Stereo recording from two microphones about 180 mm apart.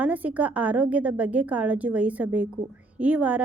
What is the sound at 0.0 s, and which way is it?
A woman's voice, 10° right (ahead or behind).